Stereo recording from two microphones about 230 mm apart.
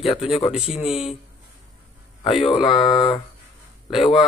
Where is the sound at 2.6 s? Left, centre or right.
Centre.